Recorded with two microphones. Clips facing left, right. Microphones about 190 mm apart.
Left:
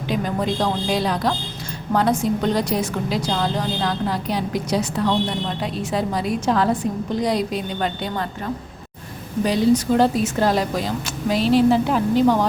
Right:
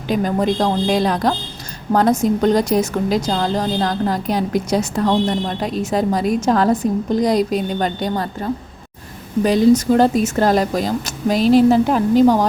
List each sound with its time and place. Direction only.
0.1 s a woman's voice: 45° right (ahead or behind)
9.4 s a woman's voice: 50° right (ahead or behind)